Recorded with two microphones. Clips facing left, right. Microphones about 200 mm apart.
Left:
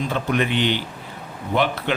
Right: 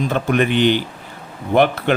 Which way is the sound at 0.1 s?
50° right (ahead or behind).